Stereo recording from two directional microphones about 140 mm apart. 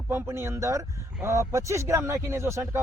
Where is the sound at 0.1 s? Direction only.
15° right (ahead or behind).